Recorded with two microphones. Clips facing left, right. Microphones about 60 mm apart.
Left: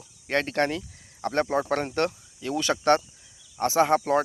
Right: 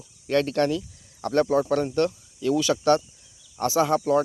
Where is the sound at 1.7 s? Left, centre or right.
Left.